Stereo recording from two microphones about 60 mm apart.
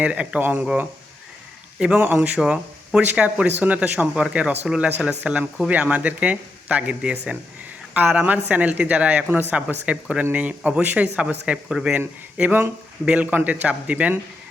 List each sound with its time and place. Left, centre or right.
0.0 s speech: right
1.8 s a man's voice: centre
2.0 s speech: right
2.4 s speech: centre
3.1 s a man's voice: right
11.9 s speech: right